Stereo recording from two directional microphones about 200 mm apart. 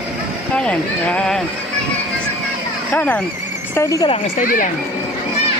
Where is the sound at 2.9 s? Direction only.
10° left (ahead or behind).